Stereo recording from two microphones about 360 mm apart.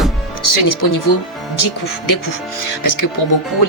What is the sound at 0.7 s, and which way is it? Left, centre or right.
Speech, left.